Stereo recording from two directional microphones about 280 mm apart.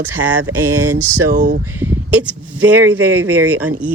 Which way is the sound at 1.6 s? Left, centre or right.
Centre.